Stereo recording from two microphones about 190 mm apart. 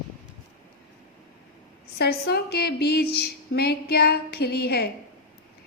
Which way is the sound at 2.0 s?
55° left (ahead or behind).